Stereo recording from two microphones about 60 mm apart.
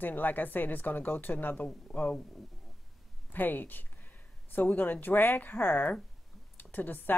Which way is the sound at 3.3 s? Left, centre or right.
Left.